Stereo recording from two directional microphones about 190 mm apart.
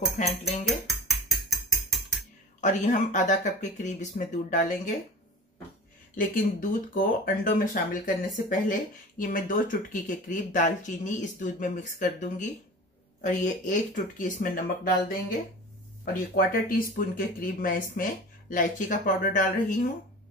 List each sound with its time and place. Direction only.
0.2 s speech: 35° left (ahead or behind)
0.7 s music: centre (ahead or behind)
2.6 s speech: 40° left (ahead or behind)
6.1 s speech: 45° left (ahead or behind)
16.1 s speech: 50° left (ahead or behind)